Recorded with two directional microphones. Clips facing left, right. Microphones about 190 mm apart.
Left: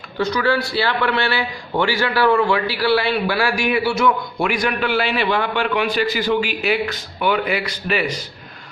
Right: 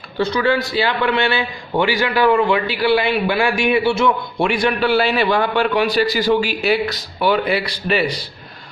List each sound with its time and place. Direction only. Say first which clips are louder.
0.2 s a man's voice: right 2 dB; 25° right (ahead or behind)